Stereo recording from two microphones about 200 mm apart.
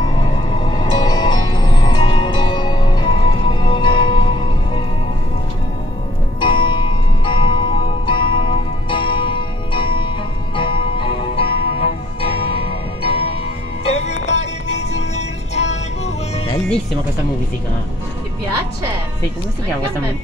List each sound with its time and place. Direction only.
0.1 s scary music: 20° left (ahead or behind)
6.4 s music: 25° left (ahead or behind)